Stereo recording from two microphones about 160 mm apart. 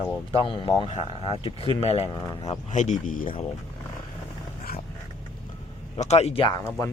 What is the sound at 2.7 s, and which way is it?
Speech, 50° left (ahead or behind).